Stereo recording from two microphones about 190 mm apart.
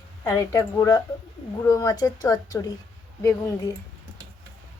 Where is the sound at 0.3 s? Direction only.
15° left (ahead or behind).